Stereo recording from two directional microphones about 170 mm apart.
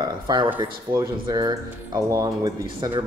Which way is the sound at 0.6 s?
25° right (ahead or behind).